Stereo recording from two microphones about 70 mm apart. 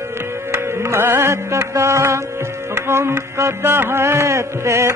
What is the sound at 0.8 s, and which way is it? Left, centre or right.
Music, right.